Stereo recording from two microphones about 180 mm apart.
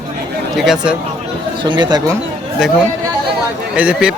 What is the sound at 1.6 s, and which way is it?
Speech, 25° right (ahead or behind).